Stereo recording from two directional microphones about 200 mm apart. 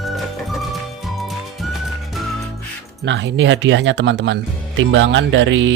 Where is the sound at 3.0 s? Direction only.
65° right (ahead or behind).